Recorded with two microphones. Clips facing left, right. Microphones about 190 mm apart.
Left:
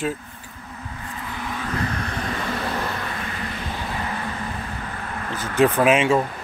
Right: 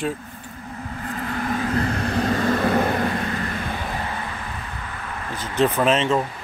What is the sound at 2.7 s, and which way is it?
Vehicle, 50° right (ahead or behind).